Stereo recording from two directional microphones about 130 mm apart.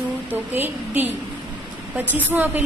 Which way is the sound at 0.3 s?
15° right (ahead or behind).